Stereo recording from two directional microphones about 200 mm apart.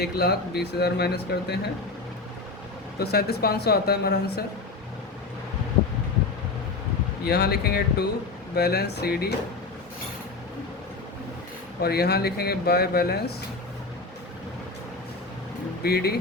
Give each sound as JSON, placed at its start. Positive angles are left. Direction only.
{"t": 0.0, "sound": "speech", "side_deg": 55}
{"t": 3.0, "sound": "speech", "side_deg": 50}
{"t": 7.3, "sound": "speech", "side_deg": 50}
{"t": 11.8, "sound": "speech", "side_deg": 50}
{"t": 15.8, "sound": "speech", "side_deg": 50}